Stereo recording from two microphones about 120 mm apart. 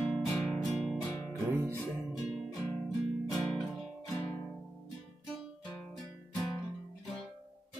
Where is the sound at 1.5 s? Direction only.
20° right (ahead or behind).